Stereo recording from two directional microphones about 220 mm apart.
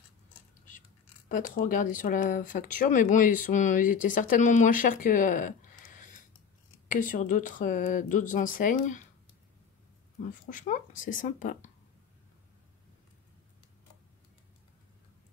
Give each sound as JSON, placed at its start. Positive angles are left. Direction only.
{"t": 1.3, "sound": "speech", "side_deg": 40}
{"t": 10.3, "sound": "speech", "side_deg": 35}